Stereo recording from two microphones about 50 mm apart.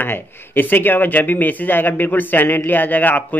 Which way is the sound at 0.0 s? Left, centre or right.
Left.